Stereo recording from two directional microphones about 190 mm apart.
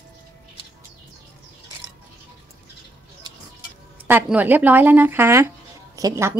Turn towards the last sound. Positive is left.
turn(degrees=-15)  # may be behind; listen again after turning